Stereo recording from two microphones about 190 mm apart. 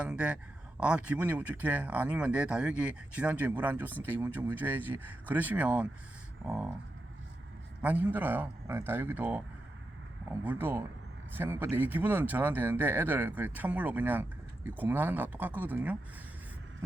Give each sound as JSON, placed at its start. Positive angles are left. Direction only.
{"t": 0.0, "sound": "speech", "side_deg": -5}
{"t": 7.8, "sound": "speech", "side_deg": -10}
{"t": 10.4, "sound": "speech", "side_deg": -10}